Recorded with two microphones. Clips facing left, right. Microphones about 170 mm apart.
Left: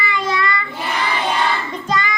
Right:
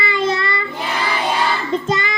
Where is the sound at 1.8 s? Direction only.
25° right (ahead or behind).